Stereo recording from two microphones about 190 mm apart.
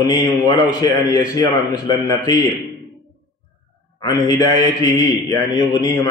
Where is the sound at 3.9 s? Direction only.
20° left (ahead or behind).